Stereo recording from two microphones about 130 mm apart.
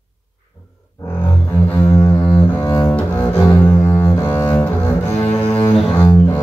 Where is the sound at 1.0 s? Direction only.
15° left (ahead or behind).